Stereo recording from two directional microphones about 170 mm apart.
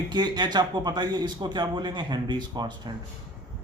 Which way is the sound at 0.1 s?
25° right (ahead or behind).